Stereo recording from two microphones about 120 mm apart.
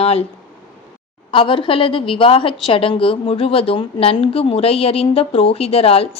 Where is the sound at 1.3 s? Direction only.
45° left (ahead or behind).